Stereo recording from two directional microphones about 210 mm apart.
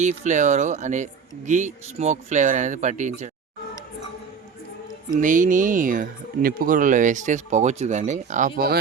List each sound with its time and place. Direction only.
0.0 s speech: 35° right (ahead or behind)
5.2 s speech: 40° right (ahead or behind)